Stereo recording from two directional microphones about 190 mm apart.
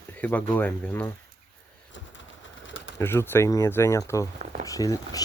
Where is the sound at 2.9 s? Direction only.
15° left (ahead or behind).